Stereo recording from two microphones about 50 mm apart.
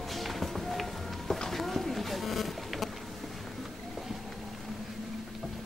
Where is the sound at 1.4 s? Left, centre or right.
Centre.